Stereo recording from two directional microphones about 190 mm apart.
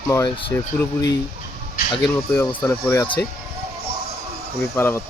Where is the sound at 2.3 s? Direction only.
15° left (ahead or behind).